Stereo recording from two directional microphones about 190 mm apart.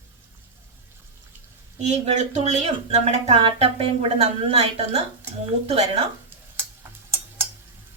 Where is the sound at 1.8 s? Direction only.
35° right (ahead or behind).